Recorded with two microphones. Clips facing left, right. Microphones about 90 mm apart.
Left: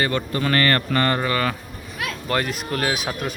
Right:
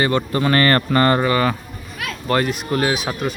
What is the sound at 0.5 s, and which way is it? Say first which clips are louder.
Speech: right 4 dB; 35° right (ahead or behind).